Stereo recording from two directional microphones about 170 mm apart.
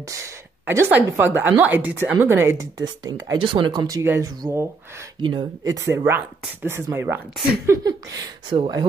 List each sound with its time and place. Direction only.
0.1 s a woman's voice: 15° right (ahead or behind)